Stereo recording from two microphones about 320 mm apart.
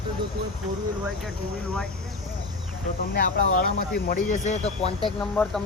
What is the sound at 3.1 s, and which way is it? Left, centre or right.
Speech, left.